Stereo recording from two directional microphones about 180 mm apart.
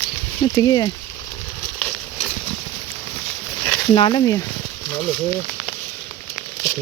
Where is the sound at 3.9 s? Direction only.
30° left (ahead or behind).